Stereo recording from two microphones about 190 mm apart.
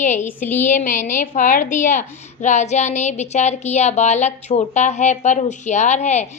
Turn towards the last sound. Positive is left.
turn(degrees=35)  # may be behind; listen again after turning